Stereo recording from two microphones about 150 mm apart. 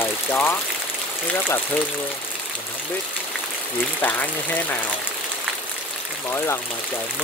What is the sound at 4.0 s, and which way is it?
Speech, 10° left (ahead or behind).